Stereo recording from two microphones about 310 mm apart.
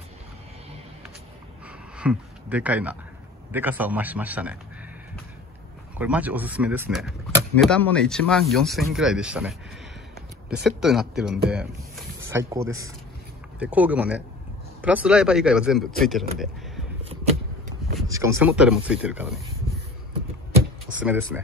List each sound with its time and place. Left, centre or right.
2.0 s speech: centre
5.9 s speech: centre
10.8 s speech: centre
16.3 s a sound: centre
18.1 s speech: centre
21.0 s speech: centre